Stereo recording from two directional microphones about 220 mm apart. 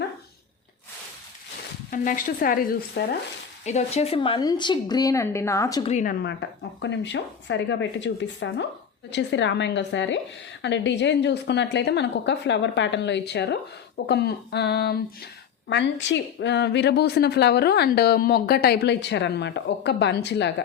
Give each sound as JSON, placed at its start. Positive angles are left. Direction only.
{"t": 1.9, "sound": "a woman's voice", "side_deg": 40}
{"t": 5.8, "sound": "a woman's voice", "side_deg": 35}
{"t": 6.8, "sound": "a woman's voice", "side_deg": 55}